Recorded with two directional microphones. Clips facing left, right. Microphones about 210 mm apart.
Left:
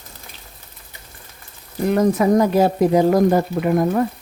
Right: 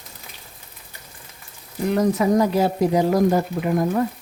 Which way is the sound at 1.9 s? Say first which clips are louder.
Left 3 dB; 50° left (ahead or behind).